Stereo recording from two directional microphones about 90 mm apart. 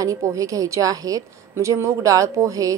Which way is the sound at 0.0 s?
40° right (ahead or behind).